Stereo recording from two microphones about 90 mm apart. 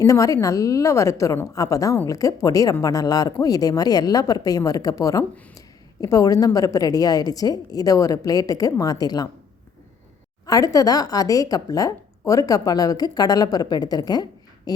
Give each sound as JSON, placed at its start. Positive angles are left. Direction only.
{"t": 0.0, "sound": "a woman's voice", "side_deg": 40}
{"t": 10.4, "sound": "speech", "side_deg": 40}